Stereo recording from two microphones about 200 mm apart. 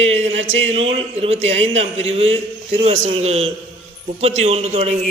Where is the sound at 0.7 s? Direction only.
30° right (ahead or behind).